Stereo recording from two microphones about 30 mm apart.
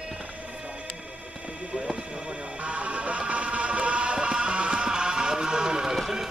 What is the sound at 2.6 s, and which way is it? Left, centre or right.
Music, right.